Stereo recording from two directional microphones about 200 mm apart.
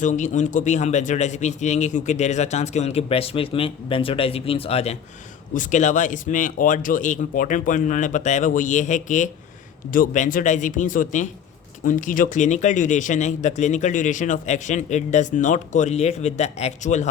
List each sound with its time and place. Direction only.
0.0 s speech: 40° left (ahead or behind)